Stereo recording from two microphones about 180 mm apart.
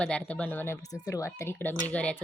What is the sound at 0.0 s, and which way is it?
A woman's voice, 5° left (ahead or behind).